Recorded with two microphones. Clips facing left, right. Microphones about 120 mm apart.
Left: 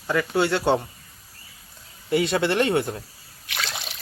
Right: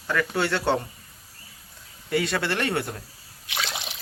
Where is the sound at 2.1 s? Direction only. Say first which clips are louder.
Left 4 dB; 20° left (ahead or behind).